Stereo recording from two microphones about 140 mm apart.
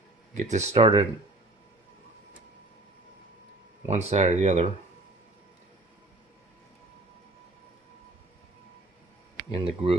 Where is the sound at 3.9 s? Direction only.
50° right (ahead or behind).